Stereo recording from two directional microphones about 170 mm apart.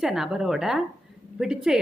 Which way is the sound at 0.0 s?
Centre (ahead or behind).